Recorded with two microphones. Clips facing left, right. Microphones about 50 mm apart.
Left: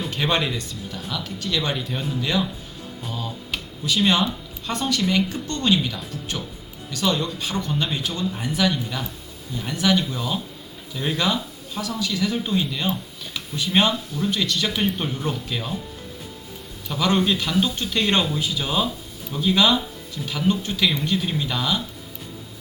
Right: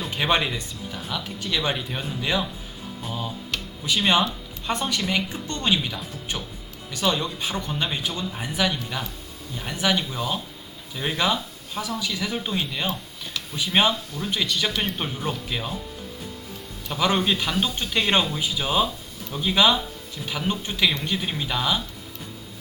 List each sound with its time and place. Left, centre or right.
0.1 s speech: centre
3.8 s a woman's voice: right
16.9 s a woman's voice: centre